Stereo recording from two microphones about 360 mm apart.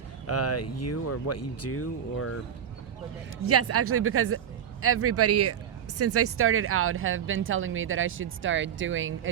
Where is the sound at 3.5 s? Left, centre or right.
Right.